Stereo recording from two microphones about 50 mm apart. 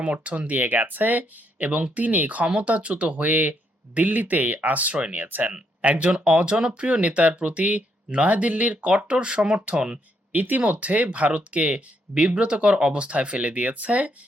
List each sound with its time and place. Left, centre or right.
0.0 s speech: right
5.5 s speech: right
10.3 s speech: right